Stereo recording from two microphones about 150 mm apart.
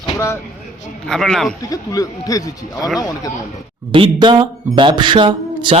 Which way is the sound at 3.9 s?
35° right (ahead or behind).